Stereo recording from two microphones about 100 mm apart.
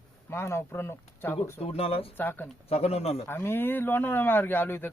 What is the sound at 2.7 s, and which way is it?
Speech, 90° left.